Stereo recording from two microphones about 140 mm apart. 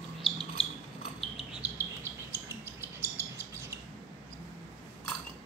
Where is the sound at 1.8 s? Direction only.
20° right (ahead or behind).